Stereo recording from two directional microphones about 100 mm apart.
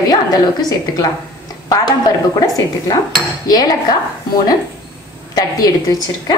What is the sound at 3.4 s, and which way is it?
Speech, 40° left (ahead or behind).